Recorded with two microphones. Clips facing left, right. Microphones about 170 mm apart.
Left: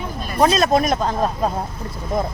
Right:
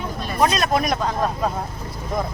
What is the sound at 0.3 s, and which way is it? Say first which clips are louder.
Speech: left 4 dB; 25° left (ahead or behind).